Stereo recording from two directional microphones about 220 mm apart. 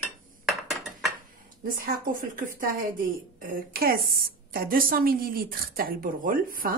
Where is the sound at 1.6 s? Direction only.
40° right (ahead or behind).